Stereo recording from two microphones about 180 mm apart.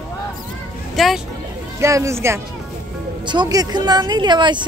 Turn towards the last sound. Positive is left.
turn(degrees=-25)  # may be behind; listen again after turning